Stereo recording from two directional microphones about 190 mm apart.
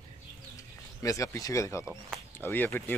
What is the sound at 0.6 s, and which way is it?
Speech, 15° left (ahead or behind).